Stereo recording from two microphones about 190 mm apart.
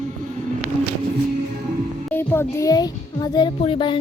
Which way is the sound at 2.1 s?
10° left (ahead or behind).